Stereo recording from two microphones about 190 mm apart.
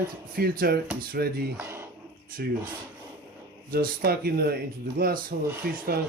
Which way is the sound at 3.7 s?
50° right (ahead or behind).